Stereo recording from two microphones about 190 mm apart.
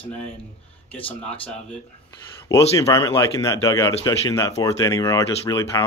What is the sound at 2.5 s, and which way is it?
Speech, 15° left (ahead or behind).